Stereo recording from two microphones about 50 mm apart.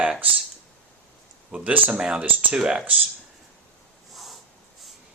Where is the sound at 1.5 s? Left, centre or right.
Right.